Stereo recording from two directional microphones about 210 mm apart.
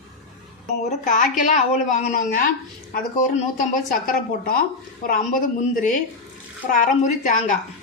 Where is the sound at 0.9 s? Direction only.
35° left (ahead or behind).